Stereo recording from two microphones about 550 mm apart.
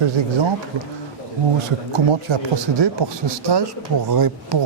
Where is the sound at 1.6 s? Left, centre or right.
Right.